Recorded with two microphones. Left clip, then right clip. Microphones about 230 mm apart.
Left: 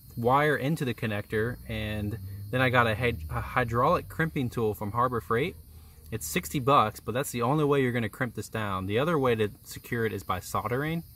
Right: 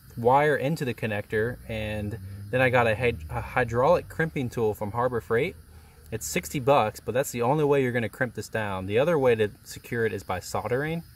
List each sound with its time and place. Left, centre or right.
0.2 s speech: left